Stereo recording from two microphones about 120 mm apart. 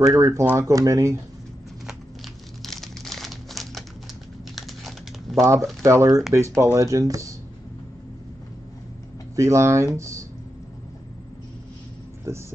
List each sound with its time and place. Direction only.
0.1 s speech: 25° right (ahead or behind)
2.6 s crumpling: centre (ahead or behind)
4.6 s typing: centre (ahead or behind)
5.4 s speech: 25° right (ahead or behind)
9.3 s speech: 25° right (ahead or behind)
12.3 s speech: 25° right (ahead or behind)